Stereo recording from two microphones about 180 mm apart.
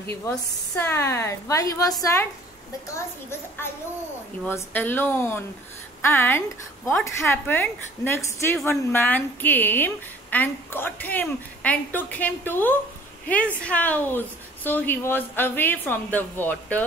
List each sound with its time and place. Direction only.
0.2 s a woman's voice: 15° left (ahead or behind)